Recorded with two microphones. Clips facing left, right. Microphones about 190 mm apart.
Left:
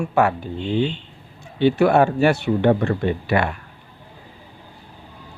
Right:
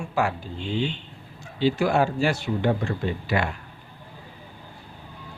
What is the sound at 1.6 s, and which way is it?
Speech, 60° left (ahead or behind).